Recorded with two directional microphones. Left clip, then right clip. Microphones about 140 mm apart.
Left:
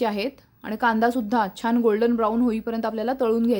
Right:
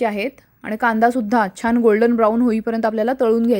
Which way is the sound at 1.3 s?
35° right (ahead or behind).